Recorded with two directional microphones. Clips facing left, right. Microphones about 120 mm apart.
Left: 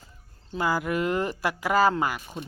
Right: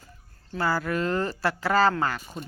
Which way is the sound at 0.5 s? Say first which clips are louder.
Even; 15° left (ahead or behind).